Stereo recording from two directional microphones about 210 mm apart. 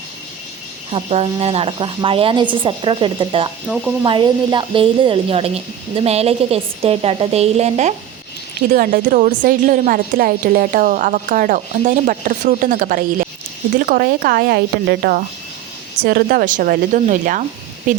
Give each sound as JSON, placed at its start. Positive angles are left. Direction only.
{"t": 0.9, "sound": "a woman's voice", "side_deg": -30}